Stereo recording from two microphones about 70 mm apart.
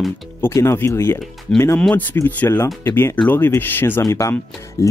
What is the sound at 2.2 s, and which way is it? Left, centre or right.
Speech, left.